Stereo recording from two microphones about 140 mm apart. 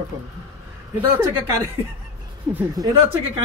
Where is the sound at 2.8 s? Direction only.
25° right (ahead or behind).